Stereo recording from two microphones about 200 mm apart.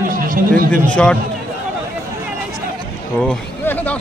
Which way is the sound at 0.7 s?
5° left (ahead or behind).